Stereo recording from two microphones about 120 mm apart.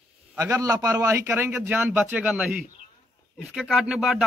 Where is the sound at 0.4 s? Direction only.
25° right (ahead or behind).